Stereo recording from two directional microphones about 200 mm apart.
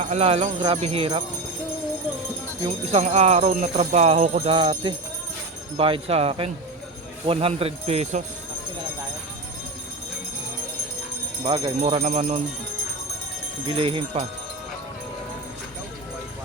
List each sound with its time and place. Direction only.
0.0 s speech: 30° right (ahead or behind)
2.9 s speech: 35° right (ahead or behind)
11.4 s speech: 25° right (ahead or behind)
13.7 s speech: 25° right (ahead or behind)